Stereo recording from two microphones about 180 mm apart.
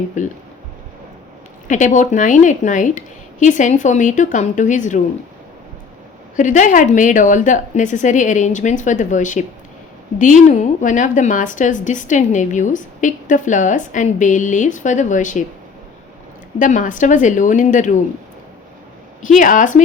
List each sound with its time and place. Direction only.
0.2 s a woman's voice: 45° left (ahead or behind)
1.6 s a woman's voice: 45° left (ahead or behind)
6.3 s a woman's voice: 45° left (ahead or behind)
16.6 s a woman's voice: 45° left (ahead or behind)
19.4 s a woman's voice: 45° left (ahead or behind)